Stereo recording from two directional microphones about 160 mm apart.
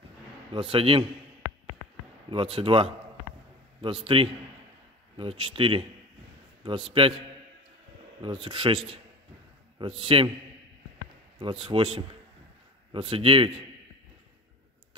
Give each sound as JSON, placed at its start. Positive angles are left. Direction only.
{"t": 0.5, "sound": "a man's voice", "side_deg": -35}
{"t": 2.2, "sound": "a man's voice", "side_deg": -35}
{"t": 8.2, "sound": "a man's voice", "side_deg": -30}
{"t": 11.6, "sound": "a man's voice", "side_deg": -35}